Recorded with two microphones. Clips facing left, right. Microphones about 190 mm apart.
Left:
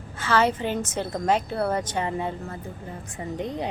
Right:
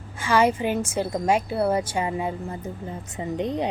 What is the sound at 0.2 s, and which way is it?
A woman's voice, 10° right (ahead or behind).